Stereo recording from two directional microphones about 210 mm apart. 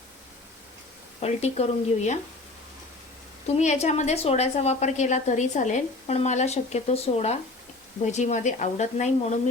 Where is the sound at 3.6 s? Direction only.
35° left (ahead or behind).